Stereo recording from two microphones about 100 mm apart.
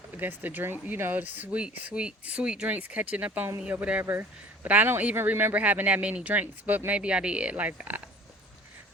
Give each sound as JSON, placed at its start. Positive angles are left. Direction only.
{"t": 0.2, "sound": "speech", "side_deg": -20}